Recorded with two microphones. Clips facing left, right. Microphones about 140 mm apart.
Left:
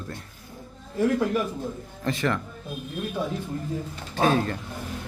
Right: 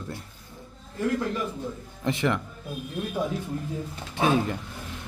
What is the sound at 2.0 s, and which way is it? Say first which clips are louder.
Speech: even; 20° right (ahead or behind).